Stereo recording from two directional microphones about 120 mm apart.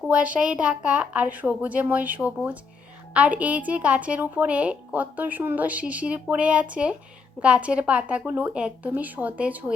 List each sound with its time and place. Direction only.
0.1 s a woman's voice: 10° right (ahead or behind)